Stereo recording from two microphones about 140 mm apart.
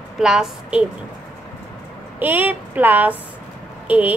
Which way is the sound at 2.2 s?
15° right (ahead or behind).